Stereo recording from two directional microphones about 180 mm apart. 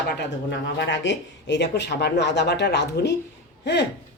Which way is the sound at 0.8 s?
80° left.